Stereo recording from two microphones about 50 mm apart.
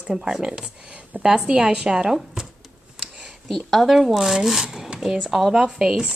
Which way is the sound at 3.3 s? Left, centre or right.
Centre.